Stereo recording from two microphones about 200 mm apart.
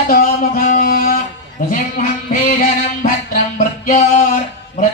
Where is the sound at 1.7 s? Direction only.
40° left (ahead or behind).